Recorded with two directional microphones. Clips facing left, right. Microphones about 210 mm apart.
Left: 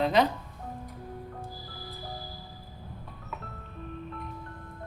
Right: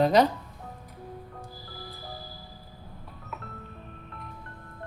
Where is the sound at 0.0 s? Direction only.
40° right (ahead or behind).